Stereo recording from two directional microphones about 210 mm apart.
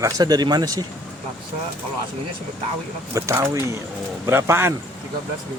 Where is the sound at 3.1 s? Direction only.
15° right (ahead or behind).